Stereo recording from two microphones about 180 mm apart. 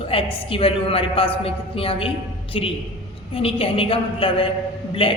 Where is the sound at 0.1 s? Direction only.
30° left (ahead or behind).